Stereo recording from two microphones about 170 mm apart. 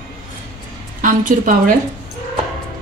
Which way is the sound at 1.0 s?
50° right (ahead or behind).